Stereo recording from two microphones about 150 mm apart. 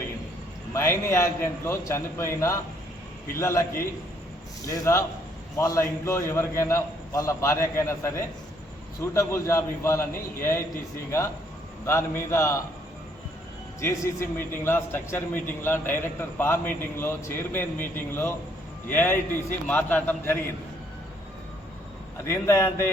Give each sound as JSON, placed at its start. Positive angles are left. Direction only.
{"t": 0.7, "sound": "a man's voice", "side_deg": 20}
{"t": 11.9, "sound": "a man's voice", "side_deg": 15}
{"t": 13.8, "sound": "a man's voice", "side_deg": 15}
{"t": 22.2, "sound": "a man's voice", "side_deg": 15}